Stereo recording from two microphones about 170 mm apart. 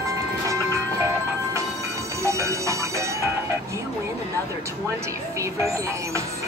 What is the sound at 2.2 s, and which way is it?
Music, 15° right (ahead or behind).